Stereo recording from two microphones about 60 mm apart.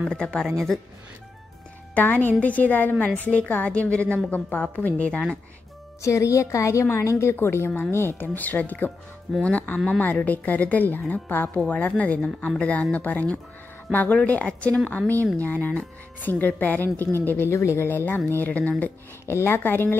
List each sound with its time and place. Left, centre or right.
0.0 s speech: centre
2.0 s speech: left
6.0 s a woman's voice: left
17.5 s speech: left
17.8 s speech: left
19.2 s speech: left